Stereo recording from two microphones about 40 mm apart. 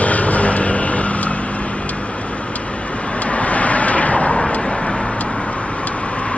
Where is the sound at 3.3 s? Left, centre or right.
Left.